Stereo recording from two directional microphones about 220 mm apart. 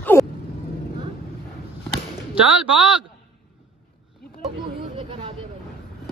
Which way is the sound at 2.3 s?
5° right (ahead or behind).